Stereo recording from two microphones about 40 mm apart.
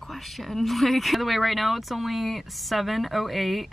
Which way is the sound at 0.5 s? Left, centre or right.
Centre.